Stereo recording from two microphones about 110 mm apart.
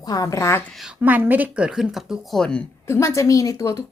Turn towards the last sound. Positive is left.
turn(degrees=30)  # may be behind; listen again after turning